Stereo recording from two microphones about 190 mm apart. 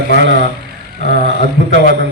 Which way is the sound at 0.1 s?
65° right (ahead or behind).